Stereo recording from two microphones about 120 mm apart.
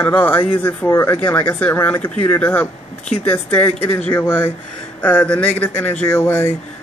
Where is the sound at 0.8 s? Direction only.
25° left (ahead or behind).